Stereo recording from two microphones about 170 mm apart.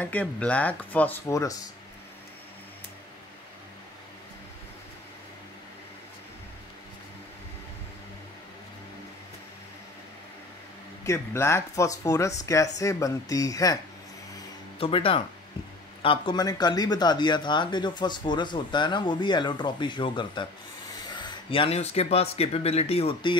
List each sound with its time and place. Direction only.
0.0 s speech: 10° left (ahead or behind)
11.1 s speech: 15° left (ahead or behind)
14.8 s speech: 30° left (ahead or behind)